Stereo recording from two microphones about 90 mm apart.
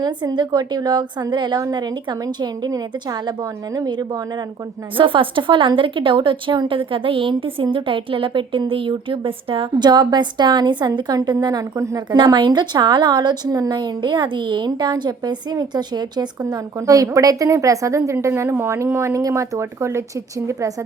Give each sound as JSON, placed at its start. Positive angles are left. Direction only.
{"t": 0.0, "sound": "a woman's voice", "side_deg": -50}
{"t": 4.9, "sound": "a woman's voice", "side_deg": -70}
{"t": 16.4, "sound": "a woman's voice", "side_deg": -40}